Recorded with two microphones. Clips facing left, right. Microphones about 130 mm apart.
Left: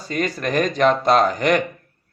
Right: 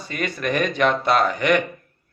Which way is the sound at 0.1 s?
40° left (ahead or behind).